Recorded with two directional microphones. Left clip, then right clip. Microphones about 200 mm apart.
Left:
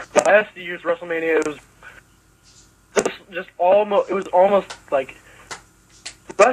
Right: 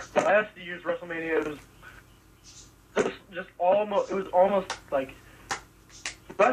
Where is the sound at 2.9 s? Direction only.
50° left (ahead or behind).